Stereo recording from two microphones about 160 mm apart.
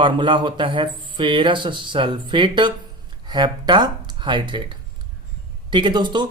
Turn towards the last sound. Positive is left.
turn(degrees=-30)  # may be behind; listen again after turning